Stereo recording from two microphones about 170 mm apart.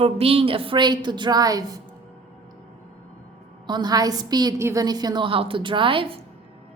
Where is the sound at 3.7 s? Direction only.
25° right (ahead or behind).